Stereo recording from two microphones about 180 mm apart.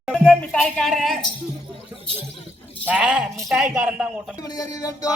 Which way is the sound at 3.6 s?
5° right (ahead or behind).